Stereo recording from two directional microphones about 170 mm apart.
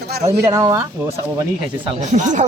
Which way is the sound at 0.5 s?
20° right (ahead or behind).